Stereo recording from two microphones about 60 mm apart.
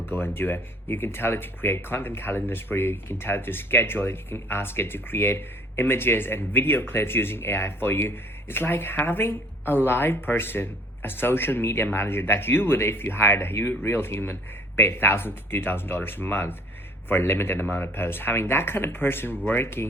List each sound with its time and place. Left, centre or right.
0.0 s speech: left